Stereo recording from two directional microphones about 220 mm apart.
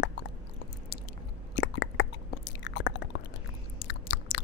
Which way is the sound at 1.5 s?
55° left (ahead or behind).